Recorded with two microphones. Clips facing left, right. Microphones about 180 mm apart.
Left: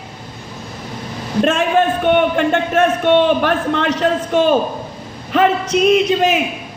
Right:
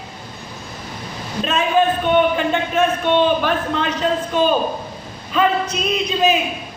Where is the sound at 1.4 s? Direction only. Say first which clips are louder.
Left 3 dB; 75° left (ahead or behind).